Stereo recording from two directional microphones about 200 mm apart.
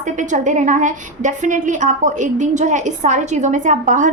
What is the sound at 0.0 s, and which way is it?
A woman's voice, 40° right (ahead or behind).